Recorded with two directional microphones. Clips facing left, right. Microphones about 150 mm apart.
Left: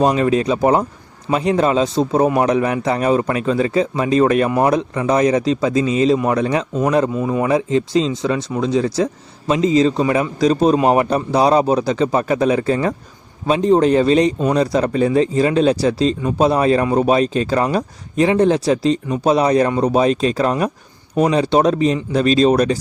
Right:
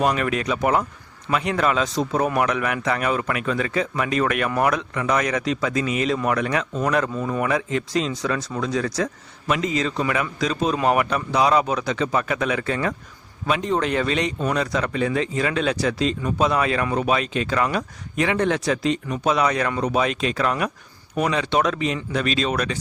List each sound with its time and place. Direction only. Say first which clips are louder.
0.0 s speech: left 7 dB; 30° left (ahead or behind)
7.4 s a man's voice: left 7 dB; 30° left (ahead or behind)